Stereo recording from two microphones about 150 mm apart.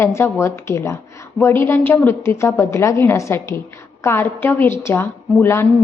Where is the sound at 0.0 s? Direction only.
20° left (ahead or behind).